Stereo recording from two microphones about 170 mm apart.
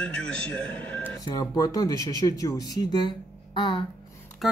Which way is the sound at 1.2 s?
20° left (ahead or behind).